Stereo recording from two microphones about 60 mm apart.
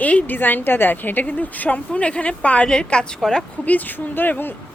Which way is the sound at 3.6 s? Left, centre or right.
Left.